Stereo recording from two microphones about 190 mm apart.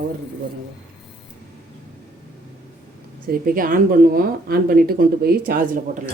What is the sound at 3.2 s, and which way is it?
Speech, 45° right (ahead or behind).